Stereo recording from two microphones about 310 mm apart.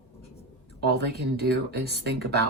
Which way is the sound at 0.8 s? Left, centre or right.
Right.